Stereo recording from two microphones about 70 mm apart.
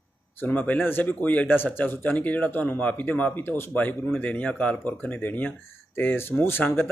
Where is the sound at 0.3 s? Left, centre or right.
Left.